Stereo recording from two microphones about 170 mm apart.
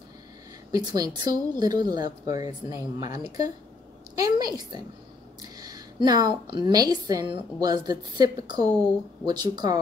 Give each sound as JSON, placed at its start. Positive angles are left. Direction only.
{"t": 0.7, "sound": "a woman's voice", "side_deg": -20}